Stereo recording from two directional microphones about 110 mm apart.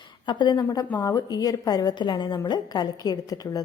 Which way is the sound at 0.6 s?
35° left (ahead or behind).